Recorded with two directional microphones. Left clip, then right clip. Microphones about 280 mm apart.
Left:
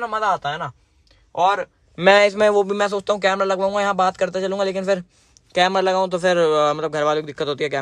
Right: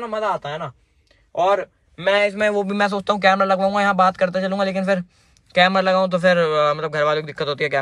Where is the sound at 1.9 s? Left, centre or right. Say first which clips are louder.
Left 4 dB; left.